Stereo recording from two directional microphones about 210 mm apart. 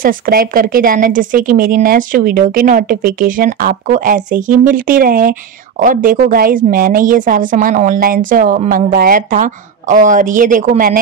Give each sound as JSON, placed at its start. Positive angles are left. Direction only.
{"t": 0.0, "sound": "a woman's voice", "side_deg": -45}